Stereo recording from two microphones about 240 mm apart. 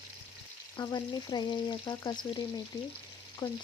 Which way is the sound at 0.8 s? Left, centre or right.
Centre.